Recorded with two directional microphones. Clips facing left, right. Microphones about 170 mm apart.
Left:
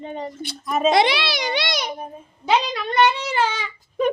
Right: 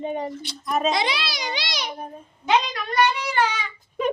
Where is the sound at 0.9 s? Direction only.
70° left (ahead or behind).